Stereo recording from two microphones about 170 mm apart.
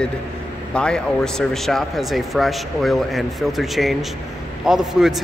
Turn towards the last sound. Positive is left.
turn(degrees=-5)  # may be behind; listen again after turning